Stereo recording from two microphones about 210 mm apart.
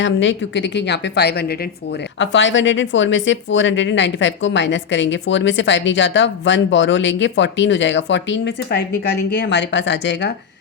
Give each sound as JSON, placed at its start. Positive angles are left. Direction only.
{"t": 0.0, "sound": "speech", "side_deg": 60}
{"t": 2.1, "sound": "speech", "side_deg": 60}